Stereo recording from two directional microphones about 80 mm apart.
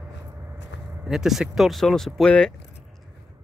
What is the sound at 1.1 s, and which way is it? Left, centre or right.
Speech, centre.